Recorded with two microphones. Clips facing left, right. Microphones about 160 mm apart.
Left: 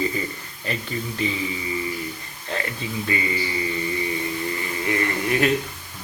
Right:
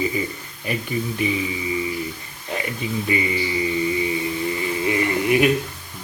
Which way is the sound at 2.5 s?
15° right (ahead or behind).